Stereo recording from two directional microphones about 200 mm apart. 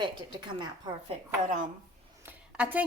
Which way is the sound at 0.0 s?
20° right (ahead or behind).